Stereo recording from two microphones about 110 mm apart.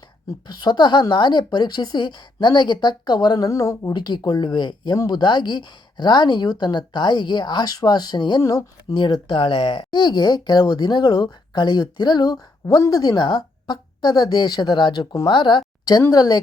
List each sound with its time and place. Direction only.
0.4 s speech: 40° left (ahead or behind)
3.9 s speech: 40° left (ahead or behind)
8.4 s speech: 30° left (ahead or behind)
9.0 s speech: 45° left (ahead or behind)
16.0 s speech: 35° left (ahead or behind)